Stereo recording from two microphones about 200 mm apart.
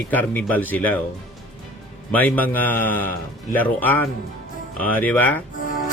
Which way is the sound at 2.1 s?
10° left (ahead or behind).